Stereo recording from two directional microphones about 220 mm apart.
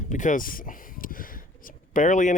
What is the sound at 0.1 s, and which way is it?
Speech, 35° left (ahead or behind).